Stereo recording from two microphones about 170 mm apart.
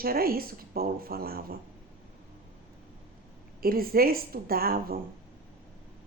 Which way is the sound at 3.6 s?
60° right (ahead or behind).